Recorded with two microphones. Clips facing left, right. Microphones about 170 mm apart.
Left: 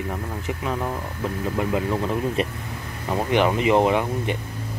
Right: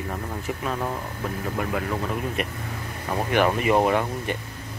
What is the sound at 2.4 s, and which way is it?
Speech, 30° left (ahead or behind).